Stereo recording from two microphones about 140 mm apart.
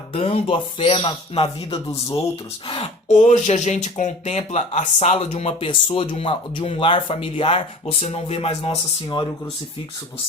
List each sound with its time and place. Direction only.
0.1 s speech: 40° left (ahead or behind)
1.9 s speech: 25° left (ahead or behind)
2.6 s speech: 40° left (ahead or behind)
3.1 s speech: 60° left (ahead or behind)